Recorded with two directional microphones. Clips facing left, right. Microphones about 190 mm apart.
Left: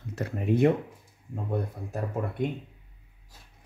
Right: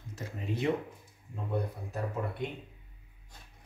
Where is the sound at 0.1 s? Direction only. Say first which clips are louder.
Left 10 dB; 60° left (ahead or behind).